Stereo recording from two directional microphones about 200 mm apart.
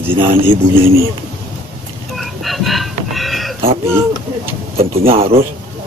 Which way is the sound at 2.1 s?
Centre (ahead or behind).